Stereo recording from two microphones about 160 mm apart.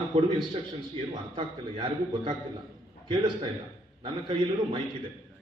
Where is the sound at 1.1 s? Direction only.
30° right (ahead or behind).